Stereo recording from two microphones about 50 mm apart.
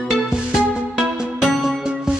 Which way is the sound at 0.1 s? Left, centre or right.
Centre.